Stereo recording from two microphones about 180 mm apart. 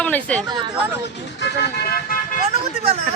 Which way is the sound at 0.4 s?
25° right (ahead or behind).